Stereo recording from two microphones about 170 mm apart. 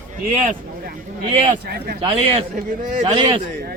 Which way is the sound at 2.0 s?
30° right (ahead or behind).